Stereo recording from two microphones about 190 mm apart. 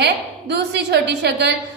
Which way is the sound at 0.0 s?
65° right (ahead or behind).